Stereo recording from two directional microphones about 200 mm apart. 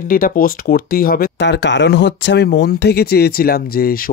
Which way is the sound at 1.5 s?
65° left (ahead or behind).